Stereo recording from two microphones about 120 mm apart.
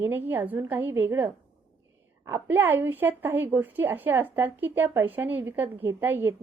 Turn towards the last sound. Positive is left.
turn(degrees=-20)  # may be behind; listen again after turning